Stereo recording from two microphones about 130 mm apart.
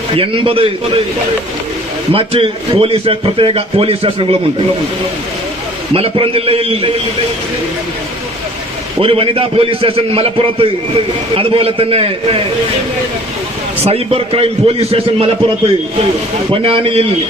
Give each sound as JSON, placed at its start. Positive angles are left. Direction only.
{"t": 0.2, "sound": "a man's voice", "side_deg": -45}
{"t": 2.1, "sound": "a man's voice", "side_deg": -45}
{"t": 5.9, "sound": "a man's voice", "side_deg": -45}
{"t": 9.0, "sound": "a man's voice", "side_deg": -45}
{"t": 13.8, "sound": "a man's voice", "side_deg": -50}